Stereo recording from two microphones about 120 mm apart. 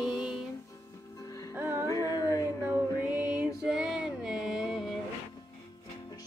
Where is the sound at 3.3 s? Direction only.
5° right (ahead or behind).